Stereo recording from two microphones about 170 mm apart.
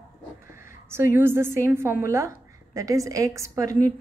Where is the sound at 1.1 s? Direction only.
15° right (ahead or behind).